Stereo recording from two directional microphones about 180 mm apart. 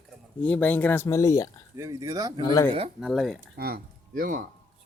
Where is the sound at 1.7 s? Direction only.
15° right (ahead or behind).